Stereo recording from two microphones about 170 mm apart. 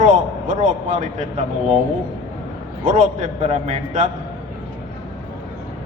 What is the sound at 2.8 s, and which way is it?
A man's voice, 50° right (ahead or behind).